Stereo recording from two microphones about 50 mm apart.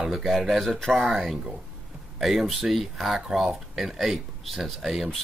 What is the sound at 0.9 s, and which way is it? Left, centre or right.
Speech, centre.